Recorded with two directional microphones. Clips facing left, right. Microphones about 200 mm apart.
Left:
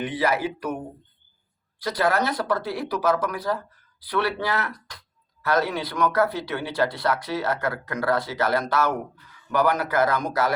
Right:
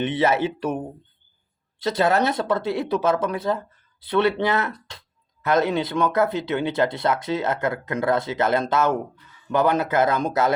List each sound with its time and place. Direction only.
0.0 s speech: 25° right (ahead or behind)
1.8 s speech: 25° right (ahead or behind)